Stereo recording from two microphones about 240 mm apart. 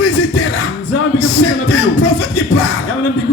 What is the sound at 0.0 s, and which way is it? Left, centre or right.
Music, left.